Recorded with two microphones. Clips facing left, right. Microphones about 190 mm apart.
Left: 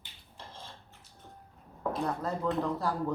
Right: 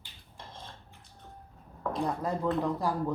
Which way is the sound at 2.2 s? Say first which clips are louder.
Right 2 dB; 10° right (ahead or behind).